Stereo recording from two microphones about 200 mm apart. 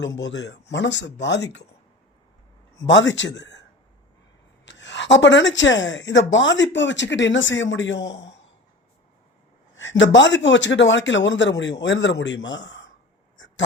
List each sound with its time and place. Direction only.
0.2 s speech: 60° left (ahead or behind)
2.8 s speech: 65° left (ahead or behind)
10.0 s speech: 65° left (ahead or behind)